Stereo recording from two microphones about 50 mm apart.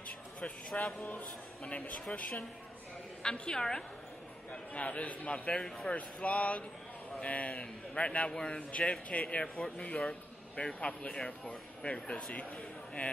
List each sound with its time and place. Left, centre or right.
1.0 s a man's voice: left
3.2 s a woman's voice: centre
4.5 s a man's voice: left